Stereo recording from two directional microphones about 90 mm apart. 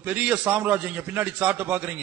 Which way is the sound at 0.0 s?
15° right (ahead or behind).